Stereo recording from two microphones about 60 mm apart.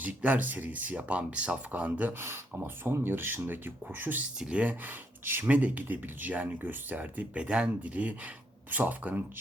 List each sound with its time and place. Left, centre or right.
0.0 s speech: right
2.8 s speech: right
4.4 s speech: centre
5.2 s speech: right
5.5 s speech: right
7.0 s speech: right